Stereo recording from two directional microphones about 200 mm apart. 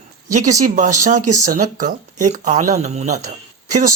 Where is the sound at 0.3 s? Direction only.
35° right (ahead or behind).